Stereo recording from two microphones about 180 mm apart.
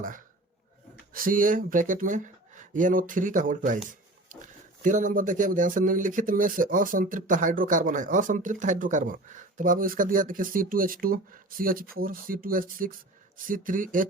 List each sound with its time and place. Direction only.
1.1 s speech: 50° right (ahead or behind)